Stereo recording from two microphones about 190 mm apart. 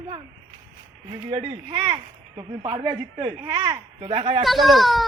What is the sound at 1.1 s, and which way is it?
Speech, 30° right (ahead or behind).